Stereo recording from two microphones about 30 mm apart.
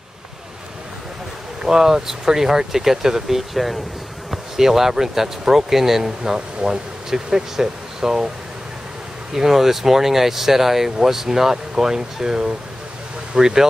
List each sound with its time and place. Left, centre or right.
1.6 s speech: centre
9.3 s speech: centre